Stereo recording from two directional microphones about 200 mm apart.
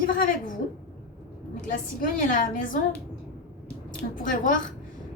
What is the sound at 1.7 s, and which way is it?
A woman's voice, 40° left (ahead or behind).